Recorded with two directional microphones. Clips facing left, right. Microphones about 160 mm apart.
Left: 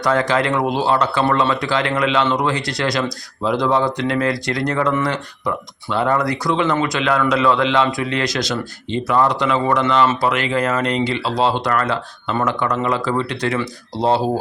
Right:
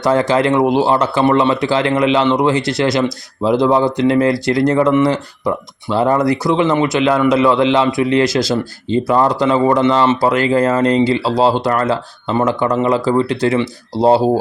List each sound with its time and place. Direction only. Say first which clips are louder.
0.0 s speech: right 4 dB; 30° right (ahead or behind)